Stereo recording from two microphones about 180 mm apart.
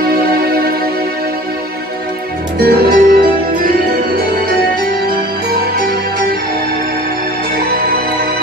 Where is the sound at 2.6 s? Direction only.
60° right (ahead or behind).